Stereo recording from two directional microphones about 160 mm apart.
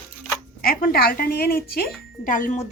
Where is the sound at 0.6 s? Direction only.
65° left (ahead or behind).